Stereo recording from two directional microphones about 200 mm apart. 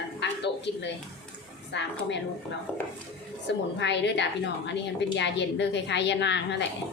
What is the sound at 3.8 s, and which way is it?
A woman's voice, 60° left (ahead or behind).